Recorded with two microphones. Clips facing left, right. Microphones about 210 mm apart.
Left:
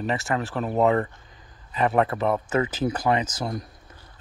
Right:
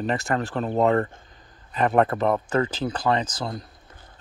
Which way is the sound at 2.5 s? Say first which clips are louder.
Even; 5° left (ahead or behind).